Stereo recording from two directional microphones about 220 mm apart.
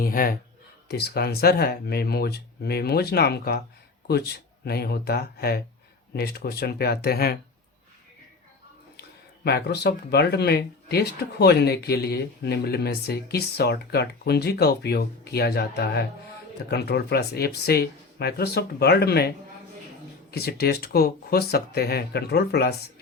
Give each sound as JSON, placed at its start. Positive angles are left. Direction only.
{"t": 0.0, "sound": "a man's voice", "side_deg": 40}
{"t": 9.0, "sound": "speech", "side_deg": 45}
{"t": 20.3, "sound": "speech", "side_deg": 45}